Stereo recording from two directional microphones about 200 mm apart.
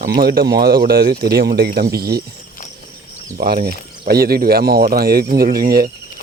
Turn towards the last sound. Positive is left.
turn(degrees=-50)  # may be behind; listen again after turning